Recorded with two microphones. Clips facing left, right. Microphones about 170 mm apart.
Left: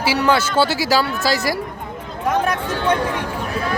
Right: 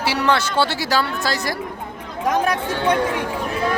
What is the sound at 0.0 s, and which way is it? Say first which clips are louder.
Speech: left 2 dB; 5° left (ahead or behind).